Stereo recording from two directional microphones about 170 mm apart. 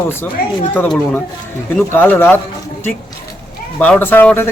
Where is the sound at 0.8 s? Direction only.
10° left (ahead or behind).